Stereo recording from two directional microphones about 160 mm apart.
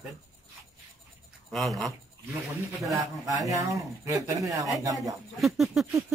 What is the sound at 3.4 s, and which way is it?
Speech, 20° right (ahead or behind).